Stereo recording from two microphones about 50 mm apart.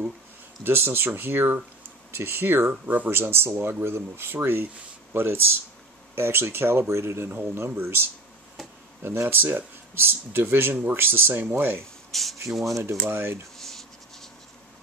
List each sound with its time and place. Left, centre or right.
0.7 s speech: right
2.7 s speech: right
3.1 s speech: right
7.7 s speech: right
12.1 s speech: centre
13.0 s speech: right
13.6 s writing: centre